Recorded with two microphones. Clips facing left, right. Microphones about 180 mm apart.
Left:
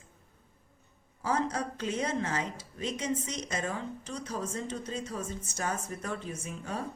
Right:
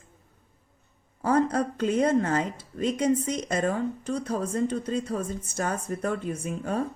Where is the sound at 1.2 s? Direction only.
55° right (ahead or behind).